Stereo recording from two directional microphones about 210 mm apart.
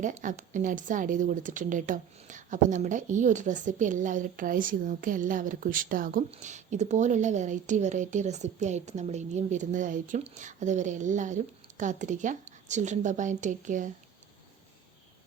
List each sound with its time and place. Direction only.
0.0 s a woman's voice: 35° right (ahead or behind)